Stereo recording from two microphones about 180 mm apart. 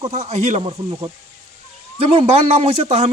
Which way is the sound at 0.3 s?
35° right (ahead or behind).